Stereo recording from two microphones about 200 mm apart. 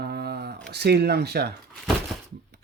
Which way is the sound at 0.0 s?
45° right (ahead or behind).